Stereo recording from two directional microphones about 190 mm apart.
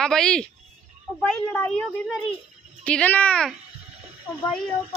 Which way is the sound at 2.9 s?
10° left (ahead or behind).